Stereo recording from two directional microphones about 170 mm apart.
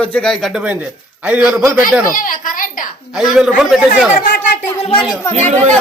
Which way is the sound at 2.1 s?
55° left (ahead or behind).